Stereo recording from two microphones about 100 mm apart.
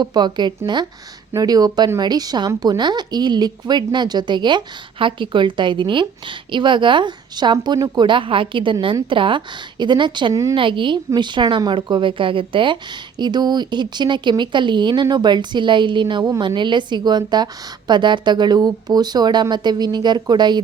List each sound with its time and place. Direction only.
0.0 s speech: 45° right (ahead or behind)